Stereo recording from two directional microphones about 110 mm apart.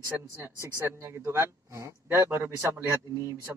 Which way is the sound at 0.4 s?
25° right (ahead or behind).